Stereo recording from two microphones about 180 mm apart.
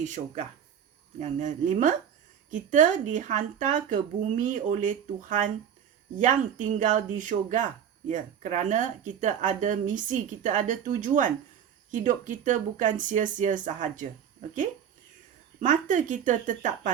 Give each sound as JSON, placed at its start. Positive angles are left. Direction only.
{"t": 0.0, "sound": "speech", "side_deg": -40}
{"t": 15.6, "sound": "speech", "side_deg": -45}